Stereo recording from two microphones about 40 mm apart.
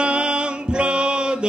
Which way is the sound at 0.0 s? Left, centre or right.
Right.